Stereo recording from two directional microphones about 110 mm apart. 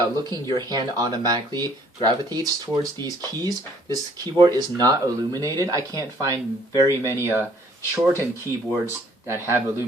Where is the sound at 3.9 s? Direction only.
40° right (ahead or behind); by 7.4 s 20° right (ahead or behind).